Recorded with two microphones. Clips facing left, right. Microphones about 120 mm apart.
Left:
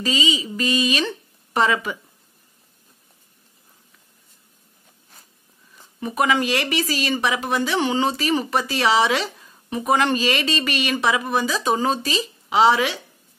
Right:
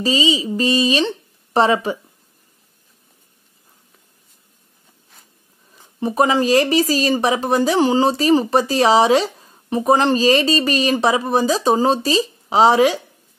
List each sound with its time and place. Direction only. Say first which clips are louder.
0.0 s speech: right 5 dB; 35° right (ahead or behind)
5.9 s speech: right 4 dB; 30° right (ahead or behind)